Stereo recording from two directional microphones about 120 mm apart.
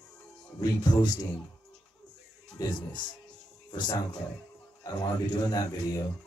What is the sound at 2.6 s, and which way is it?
Speech, 30° left (ahead or behind).